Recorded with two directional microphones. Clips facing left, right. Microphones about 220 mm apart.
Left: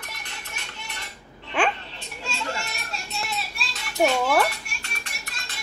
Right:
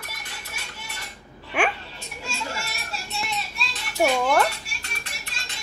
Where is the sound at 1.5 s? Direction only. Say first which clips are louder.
Even; 10° right (ahead or behind).